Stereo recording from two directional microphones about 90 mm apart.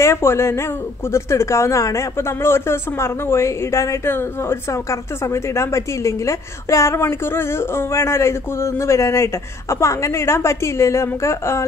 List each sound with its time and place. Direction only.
0.0 s speech: 30° left (ahead or behind)